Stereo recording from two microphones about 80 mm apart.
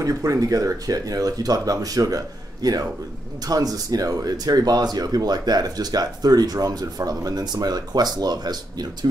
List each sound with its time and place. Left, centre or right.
0.0 s speech: right